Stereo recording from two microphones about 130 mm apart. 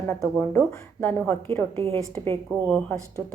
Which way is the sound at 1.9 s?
20° left (ahead or behind).